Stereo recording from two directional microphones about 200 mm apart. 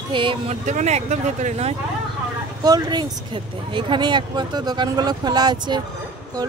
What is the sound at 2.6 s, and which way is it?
Speech, 20° right (ahead or behind).